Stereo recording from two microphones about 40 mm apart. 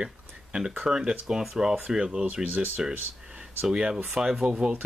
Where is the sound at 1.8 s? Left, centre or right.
Right.